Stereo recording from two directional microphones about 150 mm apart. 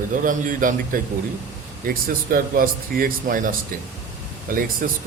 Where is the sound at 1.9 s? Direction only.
75° right (ahead or behind).